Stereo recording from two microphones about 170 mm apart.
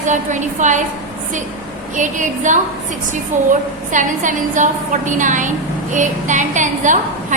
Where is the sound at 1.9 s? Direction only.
45° right (ahead or behind).